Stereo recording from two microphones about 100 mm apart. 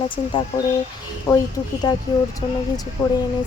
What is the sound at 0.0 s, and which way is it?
Speech, 60° left (ahead or behind).